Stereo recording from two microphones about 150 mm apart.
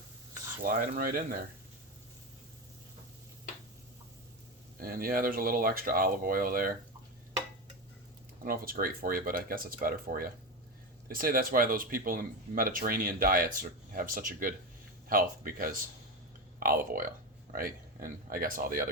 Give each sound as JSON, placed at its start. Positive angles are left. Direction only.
{"t": 0.6, "sound": "speech", "side_deg": -70}
{"t": 4.8, "sound": "speech", "side_deg": -80}
{"t": 8.4, "sound": "speech", "side_deg": -80}